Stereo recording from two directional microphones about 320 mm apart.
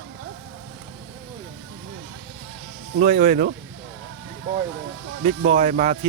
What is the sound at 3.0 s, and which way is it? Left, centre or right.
Speech, right.